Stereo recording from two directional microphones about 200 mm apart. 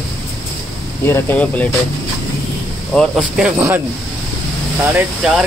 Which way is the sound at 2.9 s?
Centre (ahead or behind).